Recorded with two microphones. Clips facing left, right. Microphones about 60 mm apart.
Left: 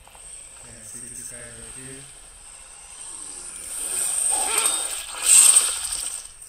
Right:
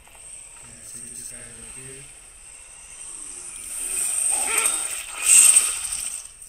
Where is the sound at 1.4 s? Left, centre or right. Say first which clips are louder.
Left 2 dB; left.